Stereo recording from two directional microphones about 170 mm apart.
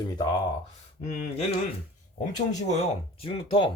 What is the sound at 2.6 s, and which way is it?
Speech, 40° left (ahead or behind).